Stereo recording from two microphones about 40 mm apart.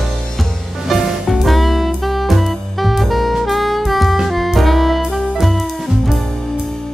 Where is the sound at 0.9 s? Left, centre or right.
Centre.